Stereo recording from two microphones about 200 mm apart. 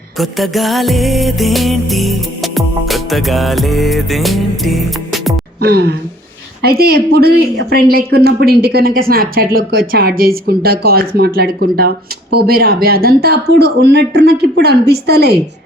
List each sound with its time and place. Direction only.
0.2 s music: centre (ahead or behind)
5.5 s a woman's voice: 55° right (ahead or behind)